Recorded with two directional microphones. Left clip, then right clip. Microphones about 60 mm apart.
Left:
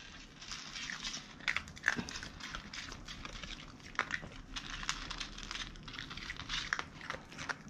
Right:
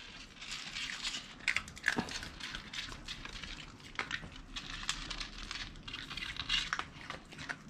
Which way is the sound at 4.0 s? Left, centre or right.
Centre.